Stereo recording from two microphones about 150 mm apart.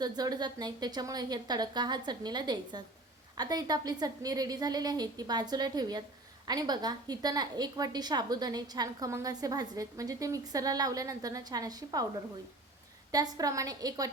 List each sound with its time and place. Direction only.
0.0 s a woman's voice: 25° right (ahead or behind)
13.1 s a woman's voice: 25° right (ahead or behind)